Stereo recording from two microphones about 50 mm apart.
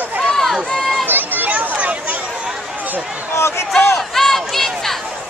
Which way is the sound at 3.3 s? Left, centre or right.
Left.